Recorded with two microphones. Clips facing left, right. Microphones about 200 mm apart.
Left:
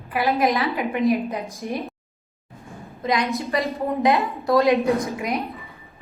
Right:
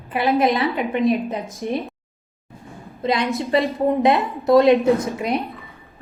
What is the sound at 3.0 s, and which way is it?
A woman's voice, 30° right (ahead or behind).